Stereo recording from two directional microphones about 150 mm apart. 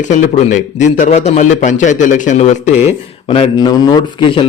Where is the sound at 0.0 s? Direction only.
50° left (ahead or behind).